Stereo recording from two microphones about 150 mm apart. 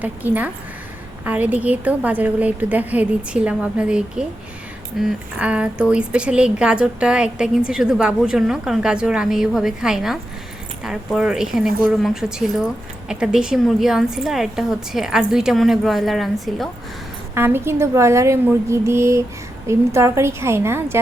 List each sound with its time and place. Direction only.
0.0 s a woman's voice: 10° right (ahead or behind)
17.3 s a woman's voice: 15° right (ahead or behind)